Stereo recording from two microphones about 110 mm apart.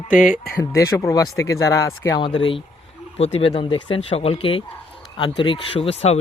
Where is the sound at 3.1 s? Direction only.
65° left (ahead or behind).